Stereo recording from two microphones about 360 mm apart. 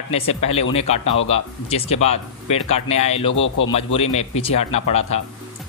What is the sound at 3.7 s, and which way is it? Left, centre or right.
Speech, centre.